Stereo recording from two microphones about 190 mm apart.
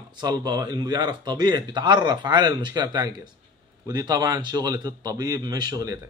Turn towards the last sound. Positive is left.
turn(degrees=-20)  # may be behind; listen again after turning